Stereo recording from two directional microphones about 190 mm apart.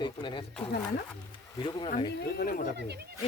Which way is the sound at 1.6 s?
25° left (ahead or behind).